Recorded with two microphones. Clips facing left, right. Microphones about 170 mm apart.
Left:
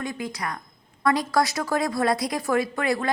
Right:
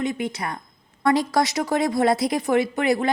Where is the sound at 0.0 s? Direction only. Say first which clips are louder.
Right 5 dB; 25° right (ahead or behind).